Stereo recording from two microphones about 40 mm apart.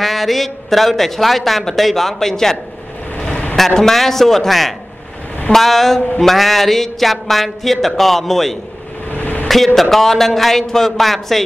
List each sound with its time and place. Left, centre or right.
0.0 s a man's voice: centre
3.2 s a sound: left
3.5 s a man's voice: centre
9.1 s vehicle: left
9.8 s a man's voice: centre